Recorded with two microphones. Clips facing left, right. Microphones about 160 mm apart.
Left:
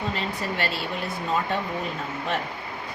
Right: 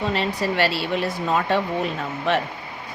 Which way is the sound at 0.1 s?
80° right.